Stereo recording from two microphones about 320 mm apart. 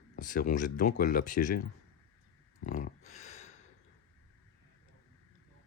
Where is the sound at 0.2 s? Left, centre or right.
Left.